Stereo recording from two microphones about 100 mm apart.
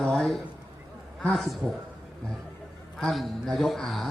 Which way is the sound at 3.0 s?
Centre (ahead or behind).